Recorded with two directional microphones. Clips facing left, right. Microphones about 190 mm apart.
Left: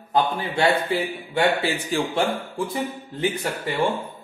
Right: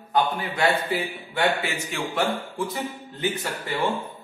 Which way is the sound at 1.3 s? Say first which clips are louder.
Left 3 dB; 30° left (ahead or behind).